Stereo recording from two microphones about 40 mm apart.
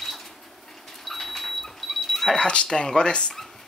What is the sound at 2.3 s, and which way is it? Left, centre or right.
Speech, left.